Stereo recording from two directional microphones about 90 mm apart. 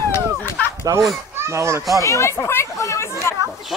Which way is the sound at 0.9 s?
40° right (ahead or behind).